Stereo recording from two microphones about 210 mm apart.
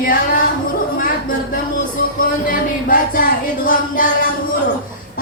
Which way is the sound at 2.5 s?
40° left (ahead or behind).